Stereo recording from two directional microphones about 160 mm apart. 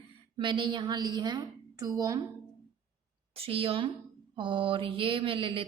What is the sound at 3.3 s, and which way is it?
Mantra, 35° right (ahead or behind).